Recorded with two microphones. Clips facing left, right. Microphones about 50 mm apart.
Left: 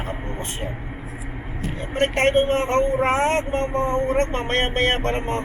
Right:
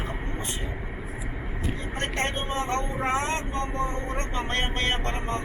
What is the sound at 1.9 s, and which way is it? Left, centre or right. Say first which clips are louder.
Speech: left 12 dB; left.